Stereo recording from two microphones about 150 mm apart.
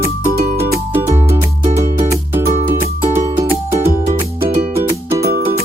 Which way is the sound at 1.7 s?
50° right (ahead or behind).